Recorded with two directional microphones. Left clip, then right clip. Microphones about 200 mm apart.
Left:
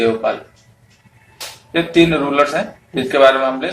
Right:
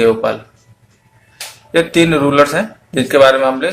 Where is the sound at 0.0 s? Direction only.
55° right (ahead or behind).